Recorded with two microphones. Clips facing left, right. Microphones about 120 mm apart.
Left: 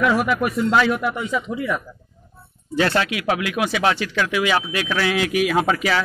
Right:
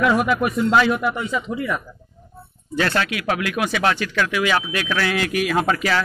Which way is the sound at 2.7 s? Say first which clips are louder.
Left 2 dB; 25° left (ahead or behind).